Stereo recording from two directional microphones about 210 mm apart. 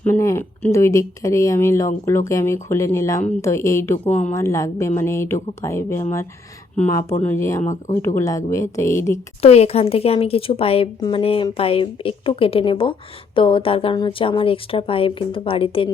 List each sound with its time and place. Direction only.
0.0 s a sound: 10° left (ahead or behind)
0.6 s speech: 15° left (ahead or behind)
7.6 s speech: 35° left (ahead or behind)
8.0 s speech: 15° left (ahead or behind)
9.1 s a woman's voice: 30° left (ahead or behind)